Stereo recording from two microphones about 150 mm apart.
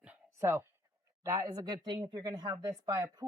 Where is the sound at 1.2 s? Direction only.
20° right (ahead or behind).